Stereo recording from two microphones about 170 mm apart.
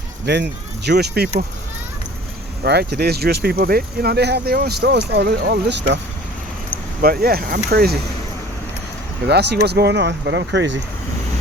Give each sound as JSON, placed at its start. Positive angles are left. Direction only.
{"t": 0.3, "sound": "speech", "side_deg": -85}
{"t": 2.6, "sound": "speech", "side_deg": -75}
{"t": 7.0, "sound": "speech", "side_deg": -60}
{"t": 9.2, "sound": "speech", "side_deg": -75}